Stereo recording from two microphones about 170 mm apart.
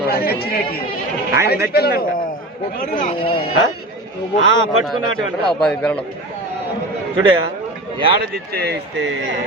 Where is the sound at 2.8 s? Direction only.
50° left (ahead or behind).